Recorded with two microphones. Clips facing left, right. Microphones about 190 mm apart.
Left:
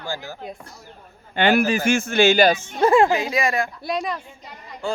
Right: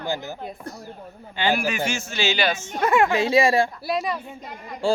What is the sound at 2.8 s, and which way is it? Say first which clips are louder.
Speech: left 4 dB; 30° left (ahead or behind).